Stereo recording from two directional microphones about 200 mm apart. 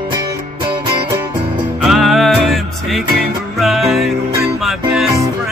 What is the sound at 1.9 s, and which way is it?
Music, centre (ahead or behind).